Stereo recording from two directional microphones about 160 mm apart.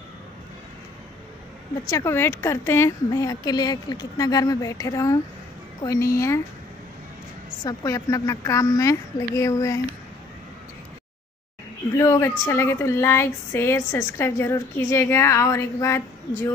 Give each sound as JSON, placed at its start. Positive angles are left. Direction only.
{"t": 1.9, "sound": "speech", "side_deg": 15}
{"t": 6.1, "sound": "speech", "side_deg": 20}
{"t": 7.6, "sound": "speech", "side_deg": 20}
{"t": 12.0, "sound": "speech", "side_deg": 15}